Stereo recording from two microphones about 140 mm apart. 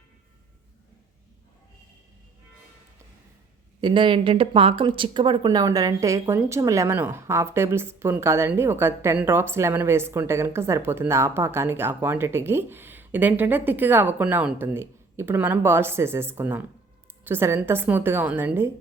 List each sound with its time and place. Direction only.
3.8 s a woman's voice: 35° right (ahead or behind); by 18.7 s 15° right (ahead or behind)